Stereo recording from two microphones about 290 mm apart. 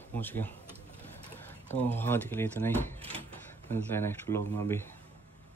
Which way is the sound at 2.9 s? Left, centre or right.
Centre.